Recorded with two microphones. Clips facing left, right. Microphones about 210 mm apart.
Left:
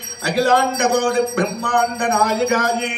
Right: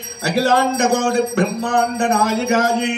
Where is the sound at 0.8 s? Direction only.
25° right (ahead or behind).